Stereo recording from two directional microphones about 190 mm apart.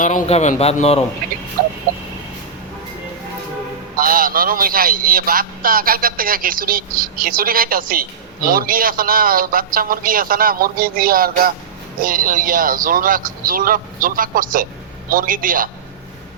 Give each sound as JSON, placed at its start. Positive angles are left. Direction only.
{"t": 0.0, "sound": "speech", "side_deg": 40}
{"t": 3.9, "sound": "speech", "side_deg": -50}